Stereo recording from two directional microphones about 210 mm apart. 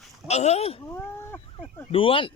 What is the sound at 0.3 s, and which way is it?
Speech, 30° left (ahead or behind).